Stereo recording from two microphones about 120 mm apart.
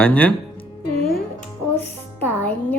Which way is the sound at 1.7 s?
15° left (ahead or behind).